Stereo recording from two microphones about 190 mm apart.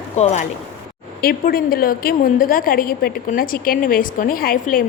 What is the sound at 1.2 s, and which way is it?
A woman's voice, 50° left (ahead or behind).